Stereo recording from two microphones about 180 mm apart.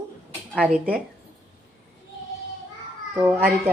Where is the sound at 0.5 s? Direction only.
5° right (ahead or behind).